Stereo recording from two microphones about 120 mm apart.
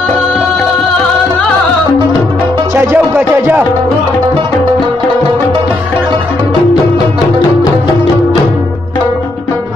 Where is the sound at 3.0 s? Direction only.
15° right (ahead or behind).